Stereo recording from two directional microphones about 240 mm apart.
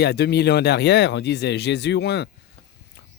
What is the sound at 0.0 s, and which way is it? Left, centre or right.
Speech, left.